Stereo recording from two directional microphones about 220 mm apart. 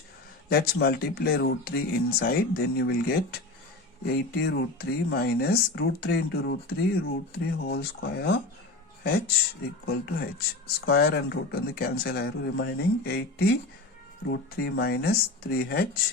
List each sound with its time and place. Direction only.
0.5 s speech: 45° left (ahead or behind)
4.0 s speech: 45° left (ahead or behind)